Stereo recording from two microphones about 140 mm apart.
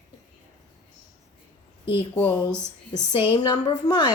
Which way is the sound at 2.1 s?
15° left (ahead or behind).